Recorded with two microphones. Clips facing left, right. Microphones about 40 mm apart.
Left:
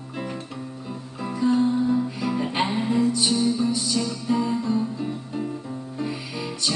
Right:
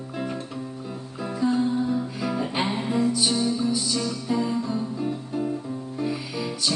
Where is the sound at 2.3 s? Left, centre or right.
Centre.